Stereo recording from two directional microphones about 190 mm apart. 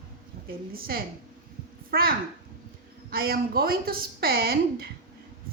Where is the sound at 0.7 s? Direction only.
50° right (ahead or behind).